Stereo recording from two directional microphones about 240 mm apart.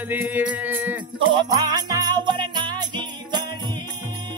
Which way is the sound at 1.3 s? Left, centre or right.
Centre.